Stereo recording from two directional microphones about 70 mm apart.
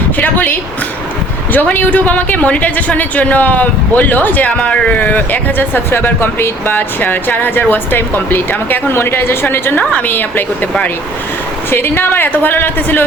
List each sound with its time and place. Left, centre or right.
1.5 s a woman's voice: left